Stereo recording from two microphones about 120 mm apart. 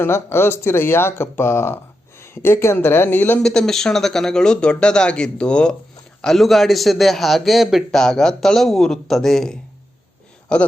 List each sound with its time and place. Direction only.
0.0 s speech: 20° left (ahead or behind)
3.4 s a man's voice: 5° left (ahead or behind)